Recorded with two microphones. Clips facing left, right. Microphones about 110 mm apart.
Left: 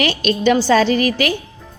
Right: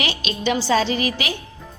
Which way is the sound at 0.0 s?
50° left (ahead or behind).